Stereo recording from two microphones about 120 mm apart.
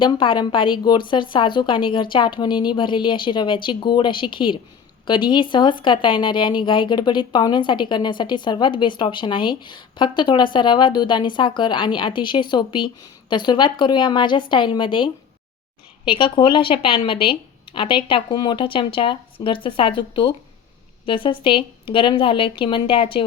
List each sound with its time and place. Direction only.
0.0 s a woman's voice: 40° left (ahead or behind)